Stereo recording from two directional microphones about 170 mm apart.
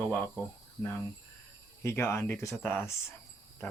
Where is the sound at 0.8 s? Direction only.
15° left (ahead or behind).